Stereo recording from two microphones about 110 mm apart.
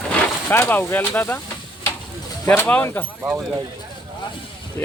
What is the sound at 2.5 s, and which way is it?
Speech, 15° left (ahead or behind).